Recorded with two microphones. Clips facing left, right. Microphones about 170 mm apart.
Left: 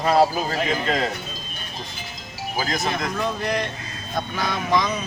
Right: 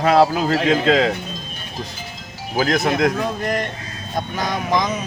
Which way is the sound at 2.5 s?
60° right (ahead or behind).